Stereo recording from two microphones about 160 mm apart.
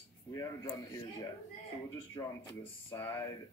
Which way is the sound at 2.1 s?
15° left (ahead or behind).